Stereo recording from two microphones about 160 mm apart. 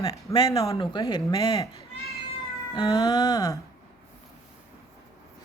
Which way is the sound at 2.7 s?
25° left (ahead or behind).